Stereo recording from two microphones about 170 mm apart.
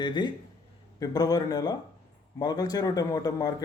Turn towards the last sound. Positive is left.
turn(degrees=20)  # may be behind; listen again after turning